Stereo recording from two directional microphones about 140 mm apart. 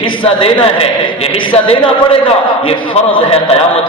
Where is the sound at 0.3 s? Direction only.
40° left (ahead or behind).